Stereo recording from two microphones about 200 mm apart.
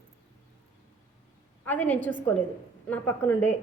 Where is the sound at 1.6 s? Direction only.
10° left (ahead or behind).